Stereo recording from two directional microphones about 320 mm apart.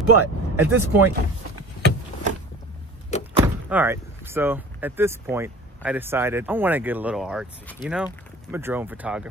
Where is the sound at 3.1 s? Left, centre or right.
Left.